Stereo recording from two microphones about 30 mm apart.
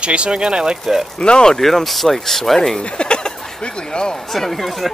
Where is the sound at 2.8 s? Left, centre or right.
Left.